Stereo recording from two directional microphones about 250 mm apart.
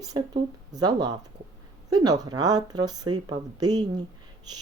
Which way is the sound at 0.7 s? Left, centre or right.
Centre.